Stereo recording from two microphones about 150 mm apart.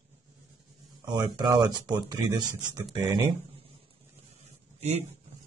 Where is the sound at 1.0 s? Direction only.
30° right (ahead or behind).